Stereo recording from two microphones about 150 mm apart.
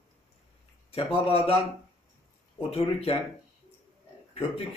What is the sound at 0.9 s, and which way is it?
Speech, 40° left (ahead or behind).